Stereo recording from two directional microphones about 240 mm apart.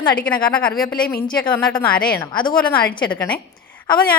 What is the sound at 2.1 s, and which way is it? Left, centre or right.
Speech, centre.